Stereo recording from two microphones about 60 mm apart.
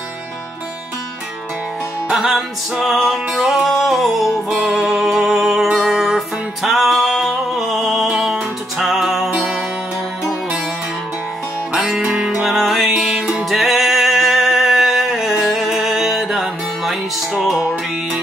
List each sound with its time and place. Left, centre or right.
2.0 s music: centre
11.7 s music: centre
17.6 s music: right